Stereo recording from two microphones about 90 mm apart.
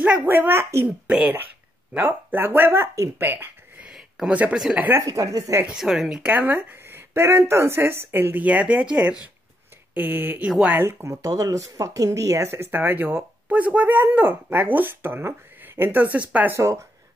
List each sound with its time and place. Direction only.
0.0 s speech: 15° right (ahead or behind)
0.8 s a woman's voice: 10° right (ahead or behind)
2.0 s speech: 20° right (ahead or behind)
3.9 s a sound: 10° right (ahead or behind)
4.7 s speech: 20° right (ahead or behind)
5.0 s speech: 40° right (ahead or behind)
5.7 s a woman's voice: 5° right (ahead or behind)
6.3 s speech: 20° right (ahead or behind)
16.5 s speech: 35° right (ahead or behind)